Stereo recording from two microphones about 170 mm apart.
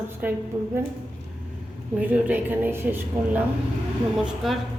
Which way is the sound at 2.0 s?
10° right (ahead or behind).